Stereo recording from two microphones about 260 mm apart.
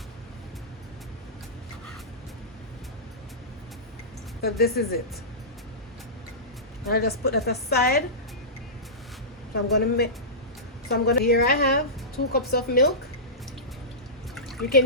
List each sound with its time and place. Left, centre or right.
4.4 s a woman's voice: left
6.8 s a woman's voice: left
9.7 s a woman's voice: left